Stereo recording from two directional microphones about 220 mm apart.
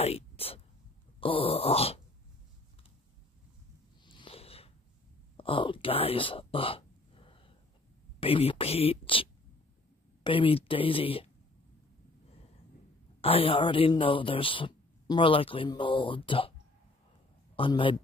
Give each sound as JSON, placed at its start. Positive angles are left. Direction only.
{"t": 0.0, "sound": "a man's voice", "side_deg": 25}
{"t": 4.0, "sound": "a sound", "side_deg": 20}
{"t": 8.2, "sound": "a man's voice", "side_deg": 25}
{"t": 13.2, "sound": "a man's voice", "side_deg": 25}
{"t": 17.6, "sound": "a man's voice", "side_deg": 20}